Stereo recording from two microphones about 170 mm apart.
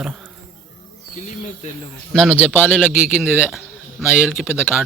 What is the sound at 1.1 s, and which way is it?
Speech, 45° left (ahead or behind).